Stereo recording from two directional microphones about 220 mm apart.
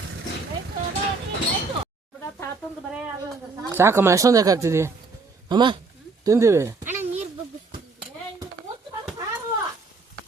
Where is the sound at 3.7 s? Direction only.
10° right (ahead or behind).